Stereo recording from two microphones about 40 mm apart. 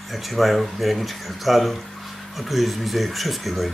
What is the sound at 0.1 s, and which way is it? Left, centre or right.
Speech, centre.